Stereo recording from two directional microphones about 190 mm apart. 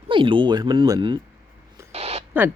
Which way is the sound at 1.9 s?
30° right (ahead or behind).